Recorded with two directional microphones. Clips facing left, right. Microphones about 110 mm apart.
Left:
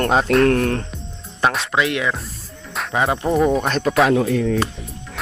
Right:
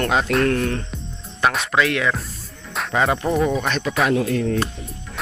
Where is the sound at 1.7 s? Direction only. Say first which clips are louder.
Even; 20° left (ahead or behind).